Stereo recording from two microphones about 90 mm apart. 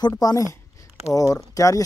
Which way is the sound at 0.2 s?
45° left (ahead or behind).